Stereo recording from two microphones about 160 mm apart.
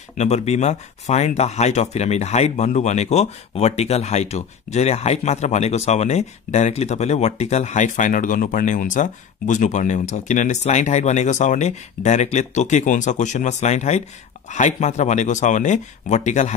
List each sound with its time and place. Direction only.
0.2 s speech: 45° left (ahead or behind)